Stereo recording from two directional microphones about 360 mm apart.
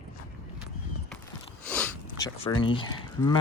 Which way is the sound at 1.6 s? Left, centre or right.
Centre.